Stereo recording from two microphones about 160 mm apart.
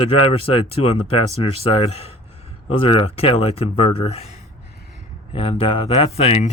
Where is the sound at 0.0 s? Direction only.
35° left (ahead or behind).